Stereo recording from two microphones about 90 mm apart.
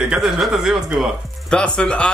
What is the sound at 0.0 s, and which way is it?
Speech, 5° right (ahead or behind).